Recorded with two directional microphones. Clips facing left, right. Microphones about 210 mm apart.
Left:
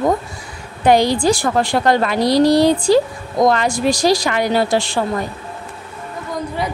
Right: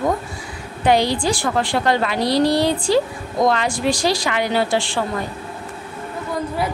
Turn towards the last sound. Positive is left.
turn(degrees=40)  # may be behind; listen again after turning